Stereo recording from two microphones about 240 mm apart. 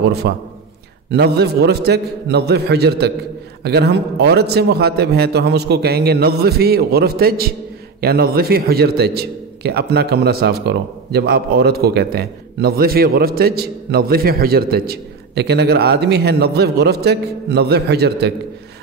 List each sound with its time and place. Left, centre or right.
0.2 s a man's voice: right